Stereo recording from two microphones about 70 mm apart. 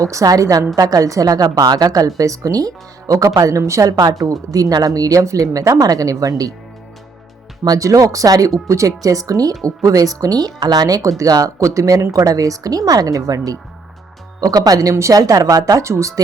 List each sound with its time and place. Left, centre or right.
0.0 s a woman's voice: right
7.6 s a woman's voice: right
9.0 s a woman's voice: right
15.1 s a woman's voice: right
15.8 s a woman's voice: right